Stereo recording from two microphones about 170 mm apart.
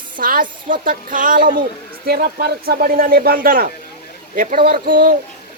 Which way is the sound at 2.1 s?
65° right (ahead or behind).